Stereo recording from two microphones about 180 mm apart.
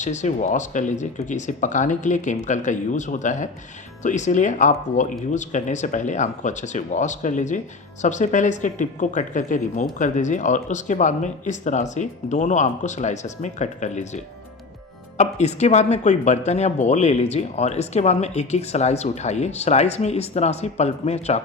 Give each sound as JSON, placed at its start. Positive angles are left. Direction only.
{"t": 0.0, "sound": "speech", "side_deg": 40}
{"t": 15.2, "sound": "speech", "side_deg": 40}